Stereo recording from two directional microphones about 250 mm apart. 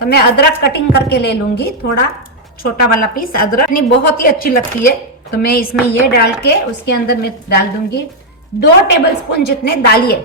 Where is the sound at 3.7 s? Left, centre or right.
Left.